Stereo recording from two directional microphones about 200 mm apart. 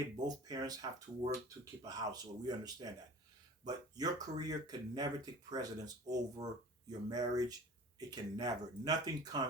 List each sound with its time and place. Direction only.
0.3 s speech: 20° right (ahead or behind)
3.9 s speech: 20° right (ahead or behind)